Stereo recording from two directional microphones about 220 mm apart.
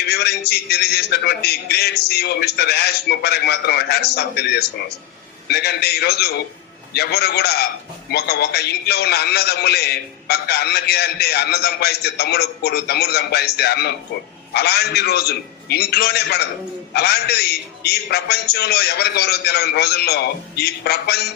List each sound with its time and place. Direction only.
0.1 s a man's voice: 45° left (ahead or behind)
5.5 s a man's voice: 45° left (ahead or behind)